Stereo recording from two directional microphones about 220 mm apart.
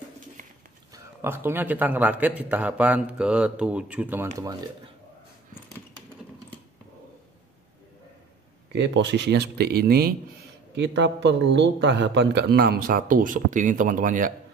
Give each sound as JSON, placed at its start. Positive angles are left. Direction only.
{"t": 0.4, "sound": "bird", "side_deg": -35}
{"t": 0.9, "sound": "a man's voice", "side_deg": -10}
{"t": 8.7, "sound": "speech", "side_deg": -55}